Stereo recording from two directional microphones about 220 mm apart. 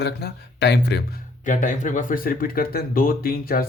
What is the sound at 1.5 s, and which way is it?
A man's voice, 35° left (ahead or behind).